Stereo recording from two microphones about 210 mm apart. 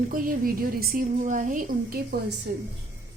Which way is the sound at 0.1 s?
45° right (ahead or behind).